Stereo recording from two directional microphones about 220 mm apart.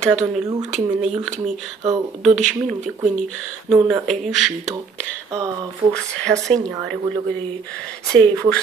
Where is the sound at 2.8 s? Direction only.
30° right (ahead or behind).